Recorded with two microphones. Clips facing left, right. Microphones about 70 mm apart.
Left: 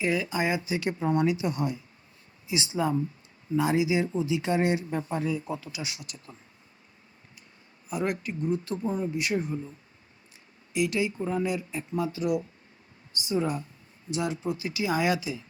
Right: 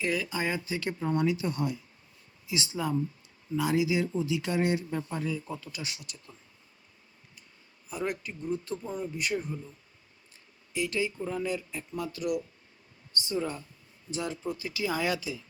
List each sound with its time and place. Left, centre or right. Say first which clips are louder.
0.0 s speech: left 3 dB; left; by 6.0 s centre
7.9 s speech: left 4 dB; centre
10.8 s speech: left 4 dB; centre
12.2 s speech: left 2 dB; left
13.1 s speech: left 4 dB; centre